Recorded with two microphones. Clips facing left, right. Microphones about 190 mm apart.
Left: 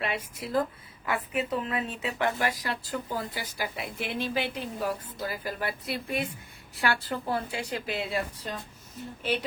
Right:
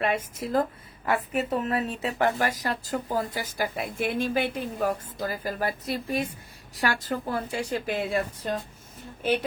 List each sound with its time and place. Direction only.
0.0 s a woman's voice: 45° right (ahead or behind)